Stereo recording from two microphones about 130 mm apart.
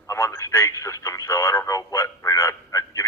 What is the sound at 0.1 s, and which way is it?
Radio, 20° left (ahead or behind).